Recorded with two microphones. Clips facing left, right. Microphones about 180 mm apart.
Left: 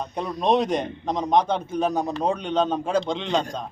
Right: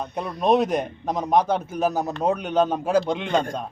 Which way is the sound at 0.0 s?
5° right (ahead or behind).